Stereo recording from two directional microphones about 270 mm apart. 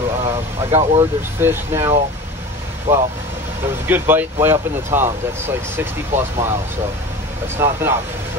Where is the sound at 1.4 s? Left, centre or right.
Centre.